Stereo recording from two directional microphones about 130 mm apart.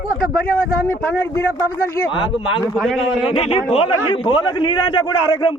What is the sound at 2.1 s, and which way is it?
Speech, 40° left (ahead or behind).